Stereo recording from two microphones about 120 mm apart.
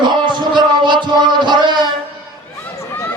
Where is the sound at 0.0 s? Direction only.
40° right (ahead or behind).